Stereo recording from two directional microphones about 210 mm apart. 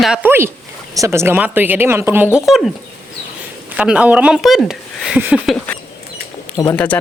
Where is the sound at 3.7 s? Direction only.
5° right (ahead or behind).